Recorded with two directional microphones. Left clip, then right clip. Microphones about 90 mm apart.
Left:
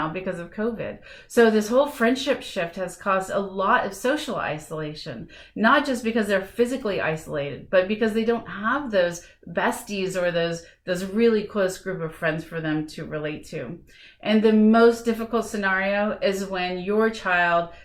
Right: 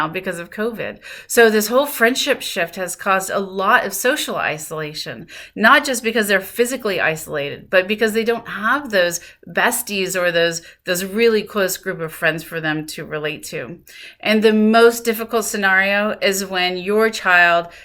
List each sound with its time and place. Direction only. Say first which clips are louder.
0.1 s a woman's voice: right 5 dB; 25° right (ahead or behind)